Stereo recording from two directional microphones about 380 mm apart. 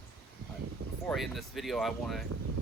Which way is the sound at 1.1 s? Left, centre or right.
Centre.